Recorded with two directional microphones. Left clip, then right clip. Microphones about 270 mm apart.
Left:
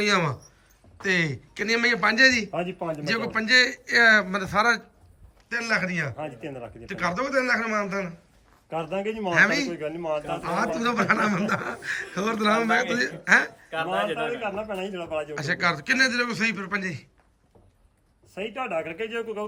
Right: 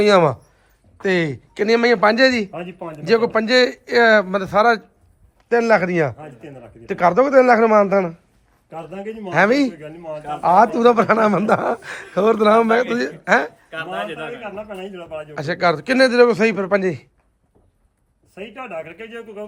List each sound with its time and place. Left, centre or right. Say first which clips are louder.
0.0 s speech: right 10 dB; centre
2.5 s a man's voice: left 1 dB; centre
2.9 s speech: right 11 dB; centre
6.1 s a man's voice: left 3 dB; centre
6.8 s speech: right 12 dB; centre
8.9 s a man's voice: left 2 dB; centre
9.3 s speech: right 5 dB; centre
9.8 s a man's voice: left 3 dB; left
10.2 s a man's voice: right 18 dB; centre
15.4 s speech: right 8 dB; centre
18.3 s a man's voice: left 1 dB; centre